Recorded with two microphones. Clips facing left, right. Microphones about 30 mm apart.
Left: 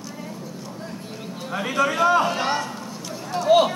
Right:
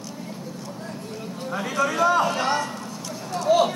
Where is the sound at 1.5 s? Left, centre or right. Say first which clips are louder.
Left 2 dB; left.